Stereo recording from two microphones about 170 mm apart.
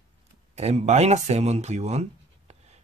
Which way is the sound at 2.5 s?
40° right (ahead or behind).